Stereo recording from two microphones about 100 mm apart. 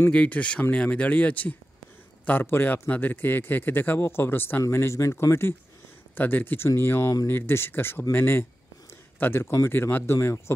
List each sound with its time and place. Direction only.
0.1 s a man's voice: 15° left (ahead or behind)